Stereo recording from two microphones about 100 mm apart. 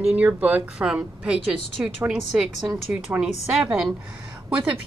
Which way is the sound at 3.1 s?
20° right (ahead or behind).